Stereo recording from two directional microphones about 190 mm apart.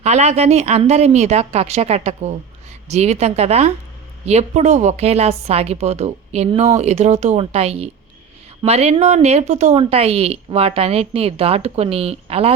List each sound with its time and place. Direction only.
0.0 s a woman's voice: 35° right (ahead or behind)